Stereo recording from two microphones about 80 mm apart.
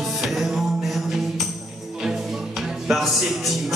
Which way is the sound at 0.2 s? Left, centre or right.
Centre.